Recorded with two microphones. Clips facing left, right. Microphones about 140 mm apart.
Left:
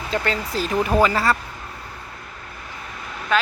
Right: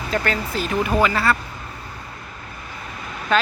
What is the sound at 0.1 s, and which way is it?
Speech, 30° left (ahead or behind).